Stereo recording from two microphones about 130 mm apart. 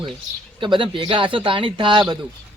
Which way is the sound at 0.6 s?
40° right (ahead or behind).